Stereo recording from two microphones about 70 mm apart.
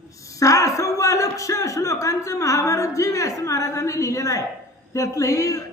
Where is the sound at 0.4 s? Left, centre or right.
Left.